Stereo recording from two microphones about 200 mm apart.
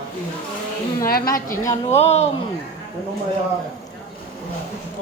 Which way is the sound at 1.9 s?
30° left (ahead or behind).